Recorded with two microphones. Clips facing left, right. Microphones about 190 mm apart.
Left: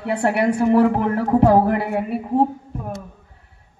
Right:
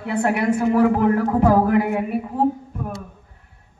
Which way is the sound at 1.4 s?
35° left (ahead or behind).